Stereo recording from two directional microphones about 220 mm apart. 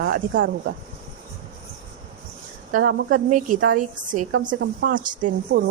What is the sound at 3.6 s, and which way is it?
Speech, 60° right (ahead or behind).